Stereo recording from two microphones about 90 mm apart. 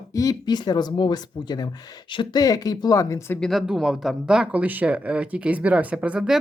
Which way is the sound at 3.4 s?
Centre (ahead or behind).